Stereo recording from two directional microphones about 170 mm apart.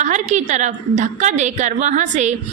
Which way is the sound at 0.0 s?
45° right (ahead or behind).